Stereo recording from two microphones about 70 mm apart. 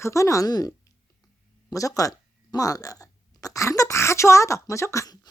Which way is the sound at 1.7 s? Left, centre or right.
Left.